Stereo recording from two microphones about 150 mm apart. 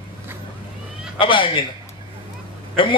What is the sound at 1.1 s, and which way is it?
Speech, 35° left (ahead or behind).